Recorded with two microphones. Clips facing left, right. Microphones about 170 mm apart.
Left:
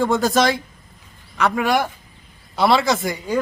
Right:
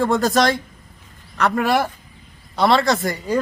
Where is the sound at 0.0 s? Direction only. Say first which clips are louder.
Even; centre (ahead or behind).